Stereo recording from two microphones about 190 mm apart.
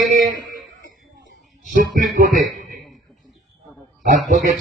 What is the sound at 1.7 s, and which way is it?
Speech, 45° right (ahead or behind).